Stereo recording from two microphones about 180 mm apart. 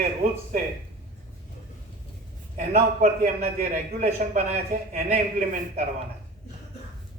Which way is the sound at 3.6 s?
55° right (ahead or behind).